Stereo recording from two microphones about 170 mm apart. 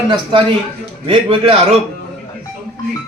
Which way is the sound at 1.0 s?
30° right (ahead or behind).